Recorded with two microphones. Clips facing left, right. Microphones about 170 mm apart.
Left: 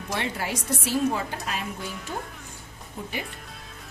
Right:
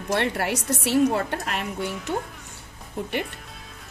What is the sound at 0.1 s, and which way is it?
A woman's voice, 65° right (ahead or behind).